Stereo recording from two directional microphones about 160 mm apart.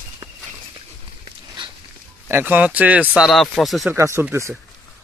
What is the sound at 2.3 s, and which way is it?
Speech, 10° right (ahead or behind).